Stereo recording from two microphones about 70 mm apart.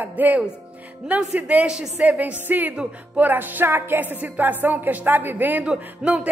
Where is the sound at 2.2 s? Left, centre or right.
Right.